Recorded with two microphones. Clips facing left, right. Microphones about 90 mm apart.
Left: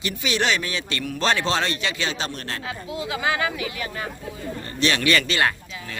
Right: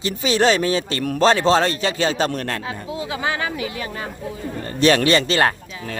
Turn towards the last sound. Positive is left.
turn(degrees=-40)  # may be behind; listen again after turning